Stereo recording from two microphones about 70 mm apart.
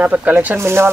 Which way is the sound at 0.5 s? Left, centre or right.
Right.